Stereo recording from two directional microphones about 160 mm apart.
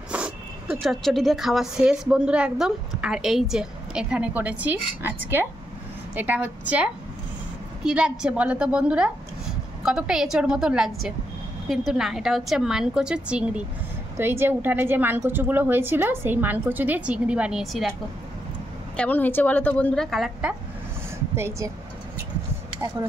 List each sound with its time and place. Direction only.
0.1 s a woman's voice: 5° right (ahead or behind)
18.9 s a woman's voice: 10° left (ahead or behind)
21.4 s a woman's voice: 20° right (ahead or behind)